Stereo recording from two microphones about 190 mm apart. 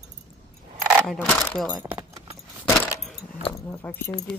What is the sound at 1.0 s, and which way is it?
Speech, 5° left (ahead or behind).